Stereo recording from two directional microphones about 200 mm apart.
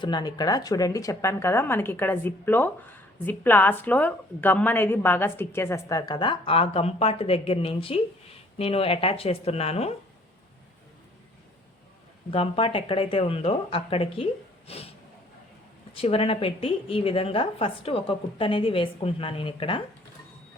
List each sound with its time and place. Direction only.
0.0 s a woman's voice: 20° left (ahead or behind)
12.3 s a woman's voice: 30° left (ahead or behind)
14.7 s vehicle: 30° left (ahead or behind)
16.0 s a woman's voice: 30° left (ahead or behind)